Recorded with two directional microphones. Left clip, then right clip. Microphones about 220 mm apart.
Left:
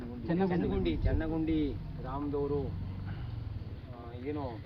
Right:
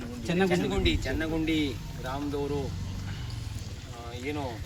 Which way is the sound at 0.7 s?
5° right (ahead or behind).